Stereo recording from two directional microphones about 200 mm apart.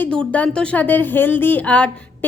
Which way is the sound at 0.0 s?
5° left (ahead or behind).